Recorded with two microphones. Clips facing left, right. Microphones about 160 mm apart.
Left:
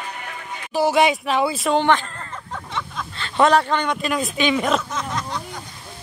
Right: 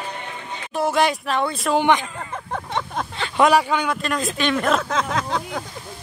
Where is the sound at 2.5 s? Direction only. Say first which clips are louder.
Right 4 dB; 50° right (ahead or behind).